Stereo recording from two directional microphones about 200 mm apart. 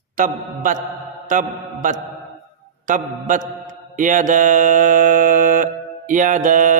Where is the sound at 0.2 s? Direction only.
40° right (ahead or behind).